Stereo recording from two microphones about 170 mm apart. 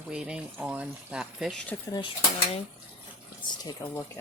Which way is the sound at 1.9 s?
30° left (ahead or behind).